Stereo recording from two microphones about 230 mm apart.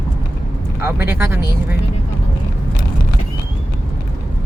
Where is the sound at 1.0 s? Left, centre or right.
Centre.